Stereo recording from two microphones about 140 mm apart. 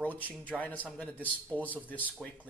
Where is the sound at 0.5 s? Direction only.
5° right (ahead or behind).